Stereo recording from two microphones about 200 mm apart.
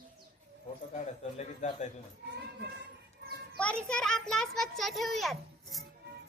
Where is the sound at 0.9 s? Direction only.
35° left (ahead or behind).